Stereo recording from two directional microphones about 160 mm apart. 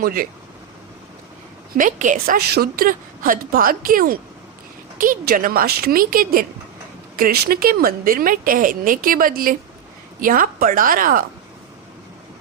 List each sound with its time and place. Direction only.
0.0 s a woman's voice: 65° right (ahead or behind)
1.7 s a woman's voice: 55° right (ahead or behind)